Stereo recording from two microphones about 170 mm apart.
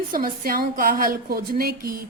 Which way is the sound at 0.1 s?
55° right (ahead or behind).